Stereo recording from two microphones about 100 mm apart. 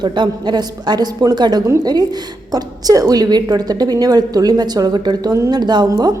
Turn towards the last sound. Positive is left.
turn(degrees=-40)  # may be behind; listen again after turning